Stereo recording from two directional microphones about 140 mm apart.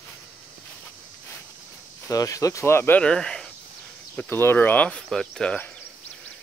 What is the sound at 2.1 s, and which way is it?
Speech, 25° left (ahead or behind).